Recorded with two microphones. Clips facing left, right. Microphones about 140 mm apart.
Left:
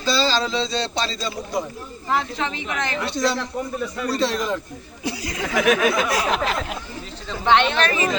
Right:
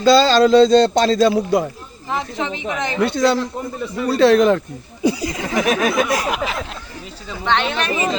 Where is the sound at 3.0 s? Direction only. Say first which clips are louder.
Right 9 dB; 60° right (ahead or behind).